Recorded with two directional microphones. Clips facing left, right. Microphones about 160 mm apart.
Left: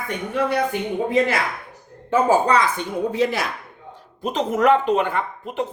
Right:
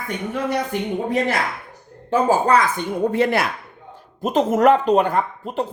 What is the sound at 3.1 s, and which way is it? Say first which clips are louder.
Speech: right 3 dB; 60° right (ahead or behind).